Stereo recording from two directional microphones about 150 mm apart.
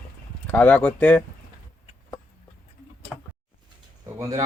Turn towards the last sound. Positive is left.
turn(degrees=-20)  # may be behind; listen again after turning